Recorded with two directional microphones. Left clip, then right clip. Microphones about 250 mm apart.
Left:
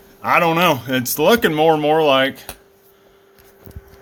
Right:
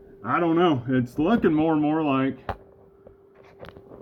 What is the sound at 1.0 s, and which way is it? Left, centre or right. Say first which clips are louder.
Speech: left 9 dB; left.